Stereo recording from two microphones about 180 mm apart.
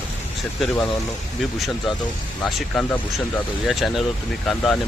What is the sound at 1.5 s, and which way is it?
Speech, centre (ahead or behind).